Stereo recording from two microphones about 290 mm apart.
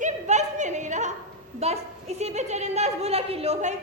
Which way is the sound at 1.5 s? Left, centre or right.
Right.